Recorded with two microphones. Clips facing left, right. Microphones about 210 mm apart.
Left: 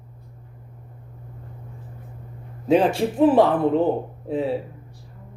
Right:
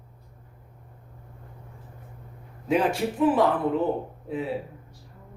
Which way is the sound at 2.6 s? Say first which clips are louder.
Left 5 dB; 30° left (ahead or behind).